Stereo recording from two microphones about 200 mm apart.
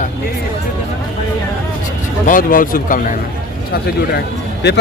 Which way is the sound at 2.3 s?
45° left (ahead or behind).